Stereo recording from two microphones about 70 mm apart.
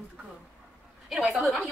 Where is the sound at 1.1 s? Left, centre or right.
Centre.